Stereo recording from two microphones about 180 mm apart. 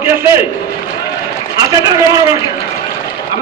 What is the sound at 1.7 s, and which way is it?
Speech, 20° right (ahead or behind).